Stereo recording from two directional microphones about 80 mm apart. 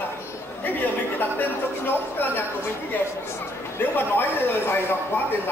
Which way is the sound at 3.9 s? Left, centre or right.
Left.